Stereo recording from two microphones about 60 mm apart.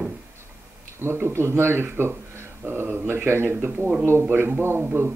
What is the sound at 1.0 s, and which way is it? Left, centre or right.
Speech, right.